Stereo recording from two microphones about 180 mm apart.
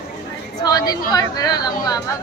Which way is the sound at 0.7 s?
20° left (ahead or behind).